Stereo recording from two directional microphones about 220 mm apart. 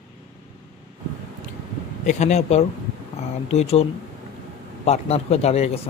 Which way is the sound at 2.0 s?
30° left (ahead or behind).